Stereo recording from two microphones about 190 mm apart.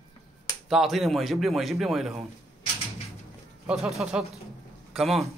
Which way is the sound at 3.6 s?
5° right (ahead or behind).